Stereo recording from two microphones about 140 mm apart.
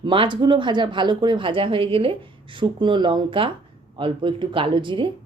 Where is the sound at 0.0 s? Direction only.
35° right (ahead or behind).